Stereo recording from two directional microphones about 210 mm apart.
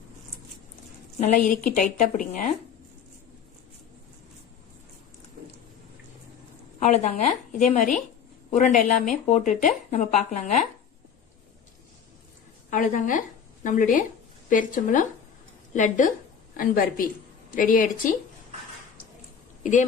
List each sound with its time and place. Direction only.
1.2 s speech: 40° left (ahead or behind)
6.7 s speech: 35° left (ahead or behind)
12.7 s speech: 40° left (ahead or behind)